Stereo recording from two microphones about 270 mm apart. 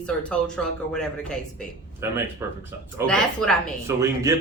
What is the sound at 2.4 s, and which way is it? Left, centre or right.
Speech, centre.